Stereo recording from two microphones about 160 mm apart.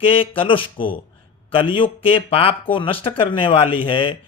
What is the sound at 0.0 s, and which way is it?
Speech, 35° left (ahead or behind).